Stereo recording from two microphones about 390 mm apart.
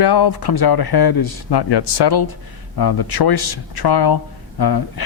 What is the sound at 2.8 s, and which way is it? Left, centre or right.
Speech, left.